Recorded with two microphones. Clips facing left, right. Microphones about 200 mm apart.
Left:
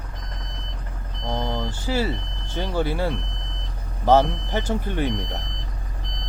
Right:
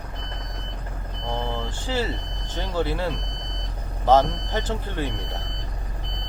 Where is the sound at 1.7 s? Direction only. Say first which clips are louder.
Left 2 dB; 10° left (ahead or behind).